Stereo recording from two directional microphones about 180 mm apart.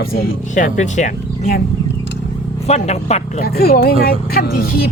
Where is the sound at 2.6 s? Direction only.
35° left (ahead or behind).